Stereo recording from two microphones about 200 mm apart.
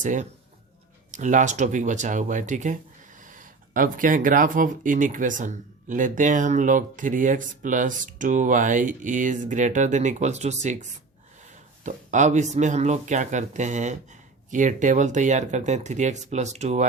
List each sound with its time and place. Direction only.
0.0 s speech: 40° right (ahead or behind)